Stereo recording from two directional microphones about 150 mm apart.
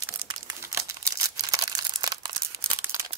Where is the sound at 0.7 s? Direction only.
20° right (ahead or behind).